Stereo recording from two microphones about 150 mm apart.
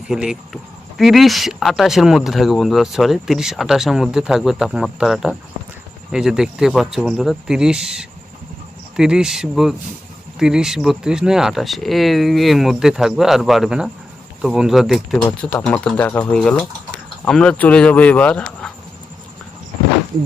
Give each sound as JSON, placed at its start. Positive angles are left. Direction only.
{"t": 0.1, "sound": "speech", "side_deg": -5}